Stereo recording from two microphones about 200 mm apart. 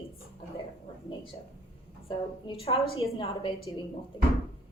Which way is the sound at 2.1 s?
25° left (ahead or behind).